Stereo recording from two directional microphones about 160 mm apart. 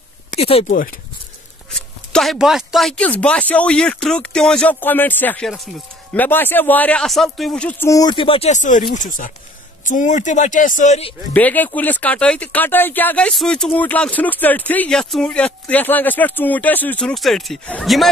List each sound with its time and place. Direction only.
0.4 s speech: 40° left (ahead or behind)
0.7 s speech: 60° left (ahead or behind)
1.7 s speech: 5° left (ahead or behind); by 11.1 s 40° left (ahead or behind)
11.3 s speech: 10° left (ahead or behind)